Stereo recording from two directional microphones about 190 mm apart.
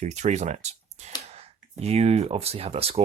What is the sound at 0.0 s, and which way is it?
Speech, 35° right (ahead or behind).